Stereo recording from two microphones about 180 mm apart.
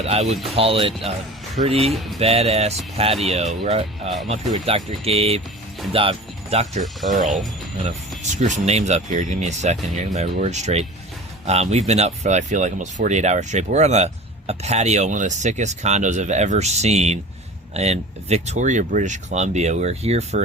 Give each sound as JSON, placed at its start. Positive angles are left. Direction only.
{"t": 0.0, "sound": "speech", "side_deg": -35}